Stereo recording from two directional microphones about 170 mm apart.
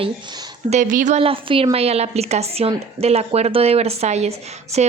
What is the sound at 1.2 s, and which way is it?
A woman's voice, 30° right (ahead or behind).